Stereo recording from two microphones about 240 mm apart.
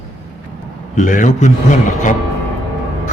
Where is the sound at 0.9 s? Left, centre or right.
Left.